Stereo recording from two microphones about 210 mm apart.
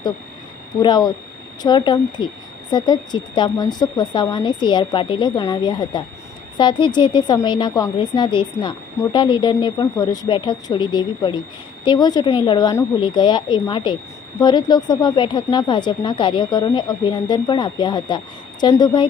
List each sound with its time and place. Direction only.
0.8 s a woman's voice: 20° left (ahead or behind)